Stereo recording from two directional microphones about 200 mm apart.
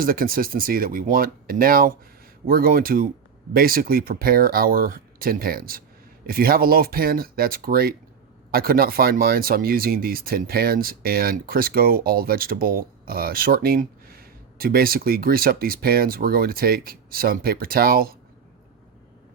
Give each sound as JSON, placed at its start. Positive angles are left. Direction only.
{"t": 0.0, "sound": "speech", "side_deg": -45}